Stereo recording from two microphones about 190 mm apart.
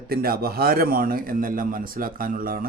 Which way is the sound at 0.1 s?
50° right (ahead or behind).